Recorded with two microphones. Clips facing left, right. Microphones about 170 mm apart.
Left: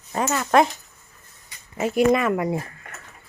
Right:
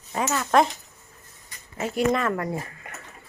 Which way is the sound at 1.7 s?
15° left (ahead or behind).